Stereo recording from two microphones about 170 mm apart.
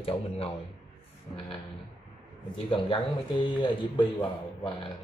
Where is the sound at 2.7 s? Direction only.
30° left (ahead or behind).